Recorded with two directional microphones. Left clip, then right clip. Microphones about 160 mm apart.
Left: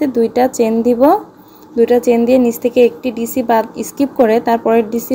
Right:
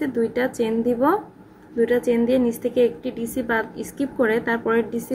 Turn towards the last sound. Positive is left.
turn(degrees=20)  # may be behind; listen again after turning